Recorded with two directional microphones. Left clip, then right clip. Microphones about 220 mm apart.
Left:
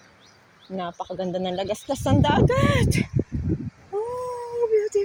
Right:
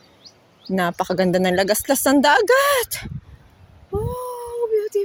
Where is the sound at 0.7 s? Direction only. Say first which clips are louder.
Right 9 dB; 50° right (ahead or behind); by 3.1 s 30° right (ahead or behind).